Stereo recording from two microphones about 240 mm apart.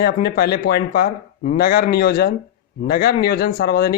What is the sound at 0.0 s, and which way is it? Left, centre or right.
Speech, left.